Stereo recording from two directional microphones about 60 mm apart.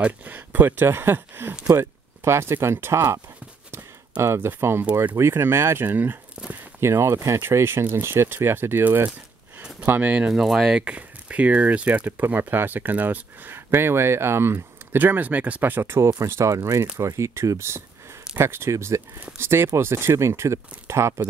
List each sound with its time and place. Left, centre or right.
0.0 s speech: right
4.2 s speech: right
5.9 s speech: right
6.4 s a sound: right
6.8 s speech: right
7.4 s speech: right
9.8 s speech: right
10.3 s speech: centre
10.7 s speech: right
15.0 s speech: right
16.3 s speech: right